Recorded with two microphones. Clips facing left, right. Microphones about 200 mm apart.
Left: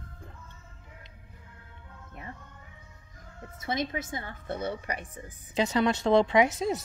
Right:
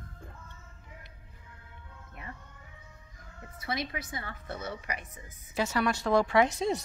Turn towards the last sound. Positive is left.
turn(degrees=0)  # may be behind; listen again after turning